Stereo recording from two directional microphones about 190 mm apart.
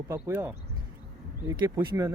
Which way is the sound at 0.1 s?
10° right (ahead or behind).